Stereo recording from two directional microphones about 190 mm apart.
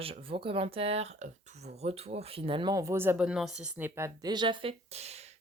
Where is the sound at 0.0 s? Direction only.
30° right (ahead or behind).